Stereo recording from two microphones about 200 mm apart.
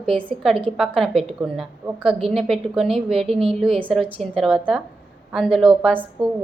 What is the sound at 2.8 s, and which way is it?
Speech, 30° right (ahead or behind).